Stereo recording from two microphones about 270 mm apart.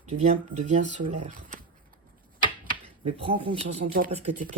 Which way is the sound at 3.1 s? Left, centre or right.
Right.